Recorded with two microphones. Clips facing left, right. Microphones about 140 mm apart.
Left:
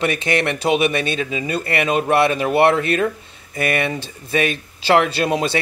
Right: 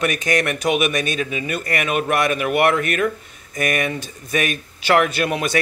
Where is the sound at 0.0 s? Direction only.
25° left (ahead or behind).